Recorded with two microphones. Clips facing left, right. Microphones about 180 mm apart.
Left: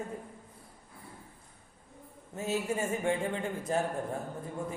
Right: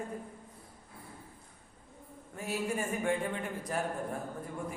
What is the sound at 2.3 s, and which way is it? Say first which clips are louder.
A man's voice: left 2 dB; 25° left (ahead or behind).